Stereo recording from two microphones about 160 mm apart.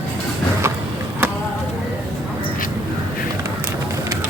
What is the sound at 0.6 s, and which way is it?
Vehicle, 15° right (ahead or behind).